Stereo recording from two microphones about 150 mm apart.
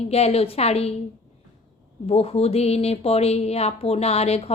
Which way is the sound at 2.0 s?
40° left (ahead or behind).